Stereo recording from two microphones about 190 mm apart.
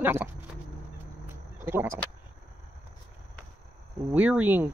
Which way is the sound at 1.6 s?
10° right (ahead or behind).